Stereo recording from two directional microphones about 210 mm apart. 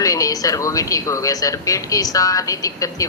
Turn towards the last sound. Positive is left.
turn(degrees=15)  # may be behind; listen again after turning